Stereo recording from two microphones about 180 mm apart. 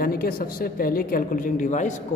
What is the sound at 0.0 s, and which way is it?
A woman's voice, 55° left (ahead or behind).